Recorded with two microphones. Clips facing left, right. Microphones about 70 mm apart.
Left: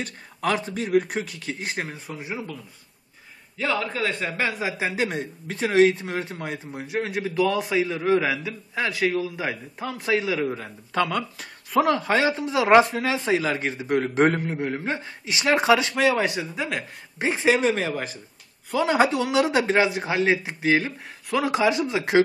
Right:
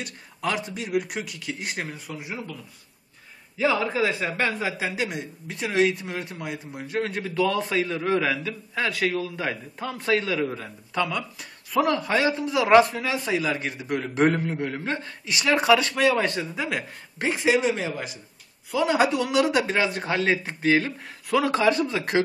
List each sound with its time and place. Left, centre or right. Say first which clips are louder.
0.0 s speech: left 2 dB; left
3.5 s a man's voice: right 3 dB; centre
4.7 s speech: left 2 dB; left
5.0 s speech: left 3 dB; left
6.8 s a man's voice: left 1 dB; centre
11.0 s speech: left 3 dB; left
11.7 s speech: left 2 dB; left
16.3 s a man's voice: even; centre
17.4 s speech: left 2 dB; left
19.9 s a man's voice: left 2 dB; centre